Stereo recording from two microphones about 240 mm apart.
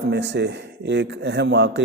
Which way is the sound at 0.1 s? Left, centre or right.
Right.